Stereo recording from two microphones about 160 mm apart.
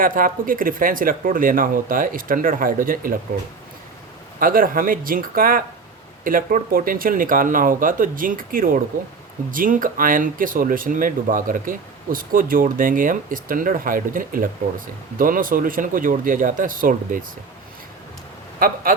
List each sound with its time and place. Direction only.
0.0 s speech: 60° right (ahead or behind)
4.4 s speech: 60° right (ahead or behind)
18.6 s speech: 65° right (ahead or behind)